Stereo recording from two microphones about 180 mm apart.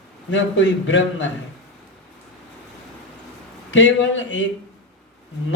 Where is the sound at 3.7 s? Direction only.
90° left.